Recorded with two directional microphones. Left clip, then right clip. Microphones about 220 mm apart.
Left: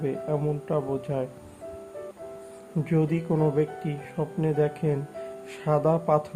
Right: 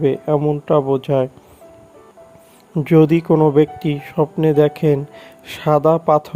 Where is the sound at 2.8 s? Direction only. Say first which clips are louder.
Right 14 dB; 40° right (ahead or behind).